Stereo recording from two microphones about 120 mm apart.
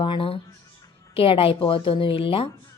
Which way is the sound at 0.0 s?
45° left (ahead or behind).